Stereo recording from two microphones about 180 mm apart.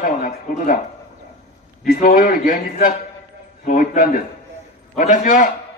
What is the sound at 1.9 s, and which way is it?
A man's voice, 55° left (ahead or behind).